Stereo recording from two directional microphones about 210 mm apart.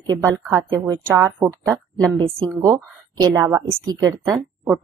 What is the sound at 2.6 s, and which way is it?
A woman's voice, 15° right (ahead or behind).